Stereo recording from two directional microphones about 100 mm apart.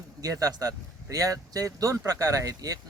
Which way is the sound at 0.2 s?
40° right (ahead or behind).